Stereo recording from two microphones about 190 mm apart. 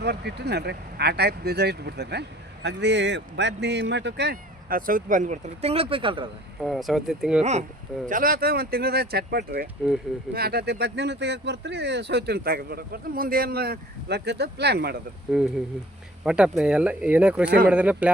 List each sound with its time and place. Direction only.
0.0 s speech: 60° right (ahead or behind); by 6.2 s 25° right (ahead or behind)
6.6 s speech: centre (ahead or behind)
8.0 s speech: 45° right (ahead or behind)
15.3 s speech: 5° right (ahead or behind)